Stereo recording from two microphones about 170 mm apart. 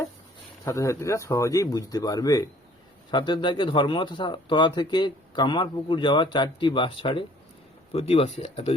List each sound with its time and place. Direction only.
0.6 s speech: 15° left (ahead or behind); by 8.7 s 35° left (ahead or behind)